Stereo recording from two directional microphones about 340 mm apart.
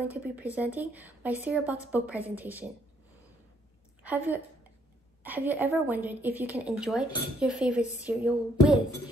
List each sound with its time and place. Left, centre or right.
0.0 s a woman's voice: centre
4.0 s a woman's voice: centre